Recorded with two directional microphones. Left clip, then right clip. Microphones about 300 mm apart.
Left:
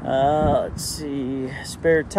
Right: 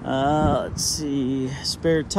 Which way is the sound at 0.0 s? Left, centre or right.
Right.